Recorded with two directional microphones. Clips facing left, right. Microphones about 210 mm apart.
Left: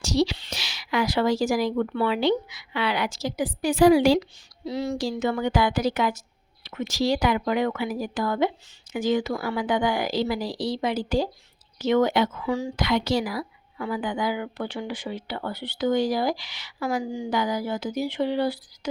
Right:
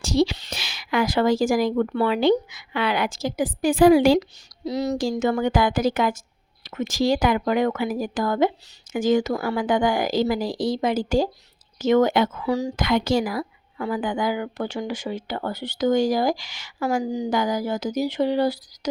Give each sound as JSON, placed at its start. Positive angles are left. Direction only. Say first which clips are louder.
{"t": 0.0, "sound": "a woman's voice", "louder": "right 3 dB", "side_deg": -50}